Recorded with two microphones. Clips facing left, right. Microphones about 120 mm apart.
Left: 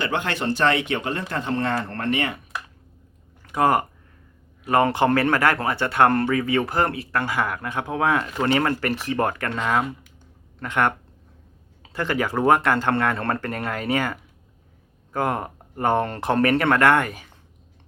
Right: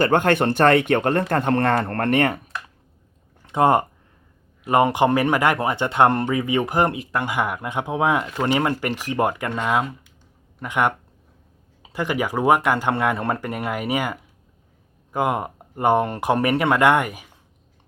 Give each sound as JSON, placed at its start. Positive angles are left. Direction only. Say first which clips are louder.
{"t": 0.0, "sound": "speech", "louder": "right 7 dB", "side_deg": -50}
{"t": 3.4, "sound": "speech", "louder": "right 2 dB", "side_deg": -25}